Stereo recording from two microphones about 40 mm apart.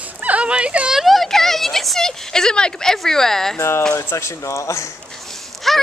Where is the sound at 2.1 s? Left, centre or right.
Centre.